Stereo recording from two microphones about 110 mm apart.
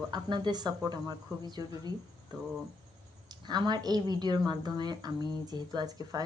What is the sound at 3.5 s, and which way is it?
A woman's voice, 40° right (ahead or behind).